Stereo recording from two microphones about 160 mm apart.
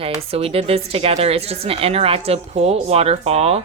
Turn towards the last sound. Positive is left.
turn(degrees=-40)  # may be behind; listen again after turning